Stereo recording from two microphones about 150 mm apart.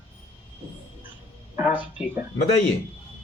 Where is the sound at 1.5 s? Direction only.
10° right (ahead or behind).